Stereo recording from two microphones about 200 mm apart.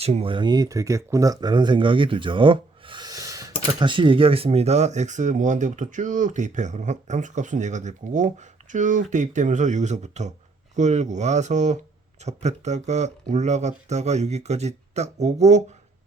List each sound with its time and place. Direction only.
0.0 s speech: 30° right (ahead or behind)